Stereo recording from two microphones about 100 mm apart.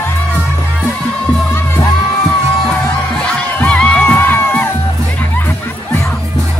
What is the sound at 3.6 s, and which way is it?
Music, 10° left (ahead or behind).